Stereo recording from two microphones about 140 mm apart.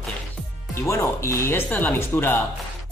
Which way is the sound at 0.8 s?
20° left (ahead or behind).